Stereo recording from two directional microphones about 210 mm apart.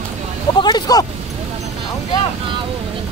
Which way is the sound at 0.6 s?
20° left (ahead or behind).